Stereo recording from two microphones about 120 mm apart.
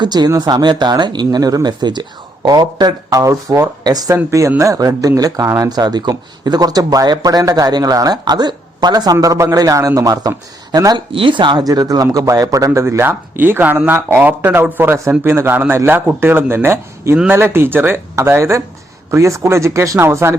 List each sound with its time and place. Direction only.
0.0 s a man's voice: 35° right (ahead or behind)